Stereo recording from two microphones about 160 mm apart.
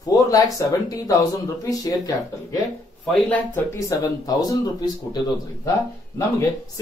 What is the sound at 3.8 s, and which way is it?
Speech, 20° left (ahead or behind).